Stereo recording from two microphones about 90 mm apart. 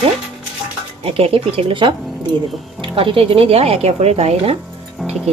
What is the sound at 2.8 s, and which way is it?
Speech, 80° right.